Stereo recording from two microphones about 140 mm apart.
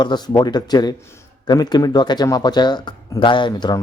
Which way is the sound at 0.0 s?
30° left (ahead or behind).